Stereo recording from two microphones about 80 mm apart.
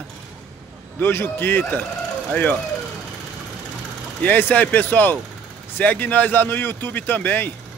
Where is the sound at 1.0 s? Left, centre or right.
Left.